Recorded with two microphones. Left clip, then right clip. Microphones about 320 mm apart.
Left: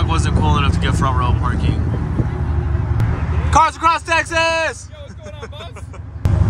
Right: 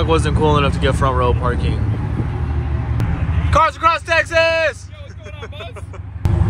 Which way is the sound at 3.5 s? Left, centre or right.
Centre.